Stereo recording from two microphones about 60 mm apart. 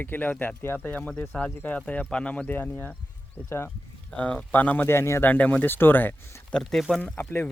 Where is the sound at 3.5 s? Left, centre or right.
Left.